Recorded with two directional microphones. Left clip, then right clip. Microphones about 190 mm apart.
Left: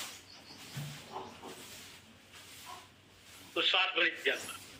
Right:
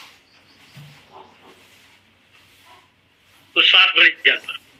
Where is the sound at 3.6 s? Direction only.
45° right (ahead or behind).